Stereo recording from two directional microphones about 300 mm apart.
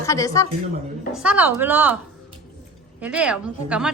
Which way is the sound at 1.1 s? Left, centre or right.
Centre.